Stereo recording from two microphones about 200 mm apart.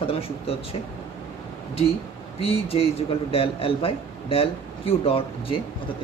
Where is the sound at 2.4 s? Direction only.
30° left (ahead or behind).